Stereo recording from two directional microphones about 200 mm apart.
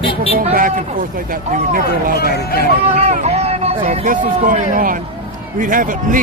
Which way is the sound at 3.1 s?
30° right (ahead or behind).